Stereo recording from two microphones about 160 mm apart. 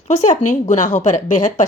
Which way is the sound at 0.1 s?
50° left (ahead or behind).